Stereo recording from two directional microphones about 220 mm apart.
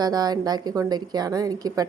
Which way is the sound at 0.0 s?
20° right (ahead or behind).